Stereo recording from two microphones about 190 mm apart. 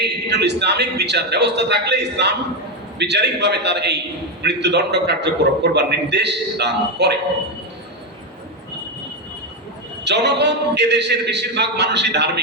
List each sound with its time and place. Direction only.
0.0 s a man's voice: 60° right (ahead or behind)
10.0 s a man's voice: 65° right (ahead or behind)